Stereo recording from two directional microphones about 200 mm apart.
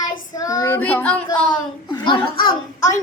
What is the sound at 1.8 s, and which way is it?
A child's voice, 20° left (ahead or behind).